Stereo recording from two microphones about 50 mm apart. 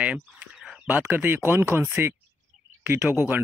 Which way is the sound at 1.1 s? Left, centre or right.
Right.